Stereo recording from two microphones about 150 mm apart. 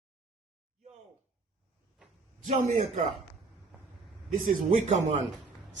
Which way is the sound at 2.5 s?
50° right (ahead or behind).